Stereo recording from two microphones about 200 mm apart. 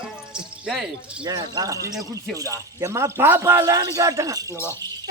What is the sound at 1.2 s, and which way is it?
Cricket, 20° right (ahead or behind).